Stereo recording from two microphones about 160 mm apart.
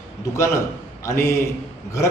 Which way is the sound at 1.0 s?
15° left (ahead or behind).